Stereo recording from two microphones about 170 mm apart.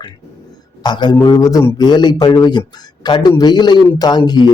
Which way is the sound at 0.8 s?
25° left (ahead or behind).